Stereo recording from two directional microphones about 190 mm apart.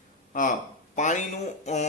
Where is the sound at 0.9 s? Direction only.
40° left (ahead or behind).